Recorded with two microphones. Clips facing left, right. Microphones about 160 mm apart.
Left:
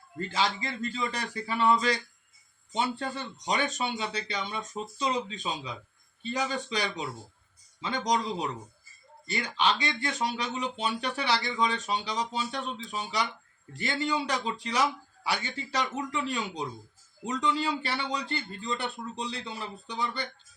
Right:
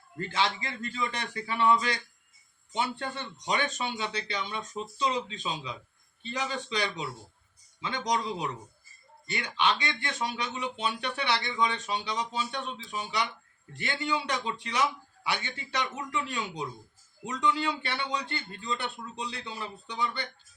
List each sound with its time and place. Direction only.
0.3 s speech: 35° left (ahead or behind)